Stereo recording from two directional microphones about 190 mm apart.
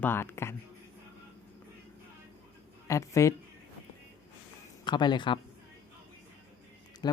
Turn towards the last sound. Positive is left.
turn(degrees=20)  # may be behind; listen again after turning